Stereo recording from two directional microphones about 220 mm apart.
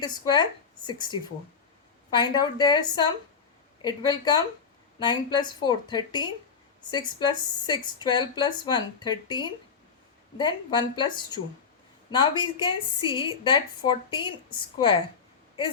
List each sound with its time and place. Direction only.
0.0 s speech: 20° left (ahead or behind)